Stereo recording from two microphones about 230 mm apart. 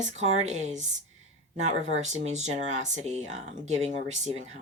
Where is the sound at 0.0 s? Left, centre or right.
Right.